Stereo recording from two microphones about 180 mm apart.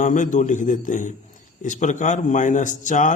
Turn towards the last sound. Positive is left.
turn(degrees=45)  # may be behind; listen again after turning